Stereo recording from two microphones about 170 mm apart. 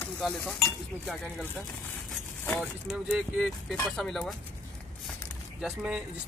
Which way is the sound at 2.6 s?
5° right (ahead or behind).